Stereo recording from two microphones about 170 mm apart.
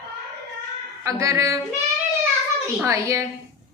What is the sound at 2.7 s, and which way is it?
Speech, 15° right (ahead or behind).